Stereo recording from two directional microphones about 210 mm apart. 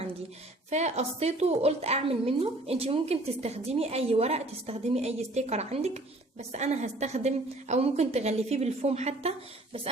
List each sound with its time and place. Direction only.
0.7 s a woman's voice: 35° right (ahead or behind)